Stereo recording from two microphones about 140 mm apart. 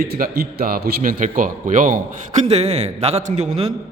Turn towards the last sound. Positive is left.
turn(degrees=-55)  # may be behind; listen again after turning